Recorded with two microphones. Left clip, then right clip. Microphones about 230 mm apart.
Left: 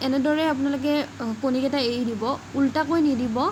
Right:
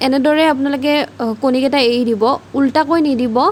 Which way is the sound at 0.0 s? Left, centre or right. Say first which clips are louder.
Right 10 dB; right.